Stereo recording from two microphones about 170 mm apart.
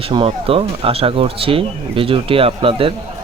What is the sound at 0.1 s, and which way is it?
Speech, 30° right (ahead or behind).